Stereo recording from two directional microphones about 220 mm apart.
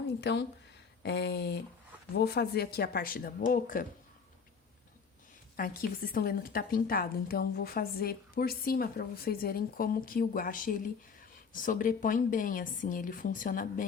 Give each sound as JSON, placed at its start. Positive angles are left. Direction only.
{"t": 0.2, "sound": "speech", "side_deg": 50}
{"t": 5.5, "sound": "a woman's voice", "side_deg": 40}